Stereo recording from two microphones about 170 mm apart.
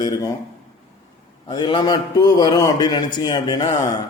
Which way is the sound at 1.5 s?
25° left (ahead or behind).